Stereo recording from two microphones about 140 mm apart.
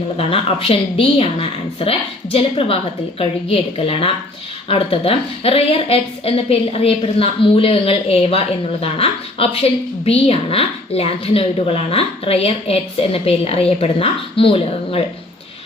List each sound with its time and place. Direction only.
0.2 s a woman's voice: 40° left (ahead or behind)